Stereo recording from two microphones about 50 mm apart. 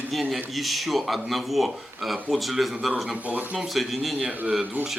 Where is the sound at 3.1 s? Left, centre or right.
Right.